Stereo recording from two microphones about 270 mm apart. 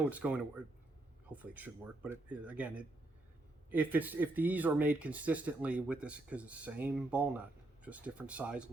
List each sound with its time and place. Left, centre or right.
0.0 s speech: centre